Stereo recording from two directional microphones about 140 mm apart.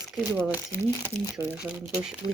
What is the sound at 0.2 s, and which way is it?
Speech, 15° right (ahead or behind).